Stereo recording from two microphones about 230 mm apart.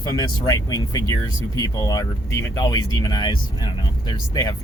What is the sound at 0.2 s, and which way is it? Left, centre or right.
Speech, centre.